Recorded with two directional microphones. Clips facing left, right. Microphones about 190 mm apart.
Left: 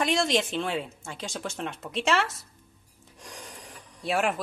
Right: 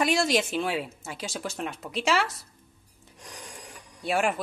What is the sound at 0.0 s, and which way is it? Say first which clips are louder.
Speech: right 1 dB; 5° right (ahead or behind).